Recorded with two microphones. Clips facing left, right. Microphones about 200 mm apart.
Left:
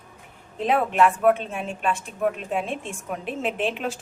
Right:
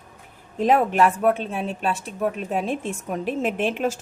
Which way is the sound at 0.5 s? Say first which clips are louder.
Right 3 dB; 45° right (ahead or behind).